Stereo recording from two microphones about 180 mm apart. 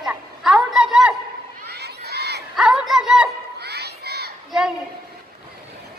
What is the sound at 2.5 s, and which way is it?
Speech, 5° right (ahead or behind).